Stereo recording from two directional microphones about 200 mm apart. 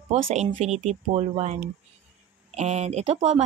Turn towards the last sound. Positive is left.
turn(degrees=-30)  # may be behind; listen again after turning